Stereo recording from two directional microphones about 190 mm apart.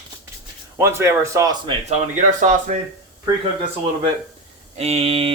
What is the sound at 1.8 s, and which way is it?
Speech, 40° right (ahead or behind).